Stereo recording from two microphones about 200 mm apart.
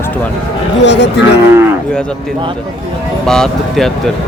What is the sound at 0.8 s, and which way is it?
Speech, 60° left (ahead or behind).